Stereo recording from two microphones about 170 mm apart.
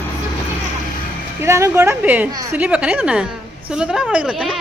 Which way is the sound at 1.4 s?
15° right (ahead or behind).